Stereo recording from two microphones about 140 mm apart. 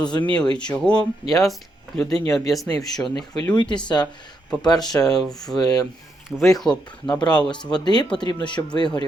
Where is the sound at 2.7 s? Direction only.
25° left (ahead or behind).